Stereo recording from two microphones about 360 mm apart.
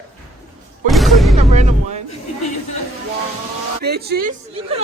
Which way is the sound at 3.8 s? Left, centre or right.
Right.